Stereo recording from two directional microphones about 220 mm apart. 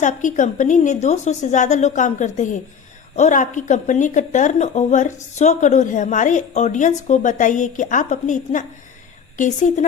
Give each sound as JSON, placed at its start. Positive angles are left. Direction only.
{"t": 0.0, "sound": "a woman's voice", "side_deg": 35}